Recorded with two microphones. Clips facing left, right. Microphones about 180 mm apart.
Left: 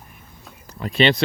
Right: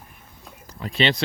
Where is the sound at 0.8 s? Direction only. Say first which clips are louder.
Left 4 dB; 55° left (ahead or behind).